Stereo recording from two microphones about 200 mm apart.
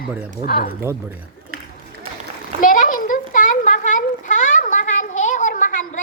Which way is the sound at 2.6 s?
40° left (ahead or behind).